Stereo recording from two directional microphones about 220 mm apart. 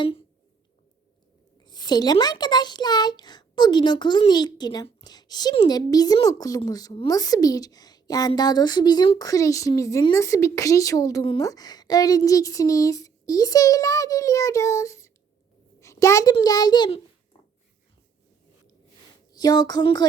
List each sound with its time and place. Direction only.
1.6 s a child's voice: 20° left (ahead or behind)
19.3 s speech: 20° left (ahead or behind)